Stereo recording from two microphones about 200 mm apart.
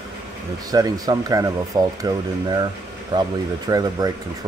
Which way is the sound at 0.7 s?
20° right (ahead or behind).